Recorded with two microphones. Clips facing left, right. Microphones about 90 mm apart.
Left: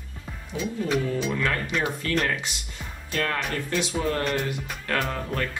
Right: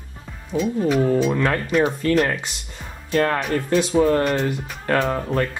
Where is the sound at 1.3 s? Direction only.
35° right (ahead or behind).